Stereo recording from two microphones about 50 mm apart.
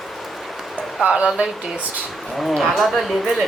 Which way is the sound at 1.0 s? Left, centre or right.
Right.